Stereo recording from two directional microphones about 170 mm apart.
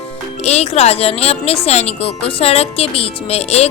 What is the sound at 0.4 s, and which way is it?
Speech, 40° left (ahead or behind).